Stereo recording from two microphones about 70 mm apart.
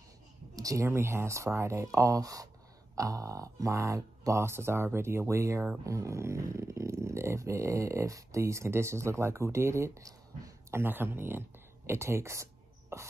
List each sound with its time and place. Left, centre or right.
0.6 s speech: right
0.8 s speech: right
10.7 s speech: right
12.9 s cough: right